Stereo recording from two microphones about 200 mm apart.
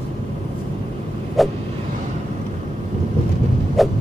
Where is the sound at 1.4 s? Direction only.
Centre (ahead or behind).